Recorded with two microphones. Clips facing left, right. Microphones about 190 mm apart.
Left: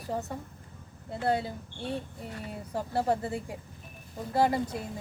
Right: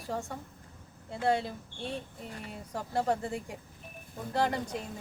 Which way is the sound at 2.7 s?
5° left (ahead or behind).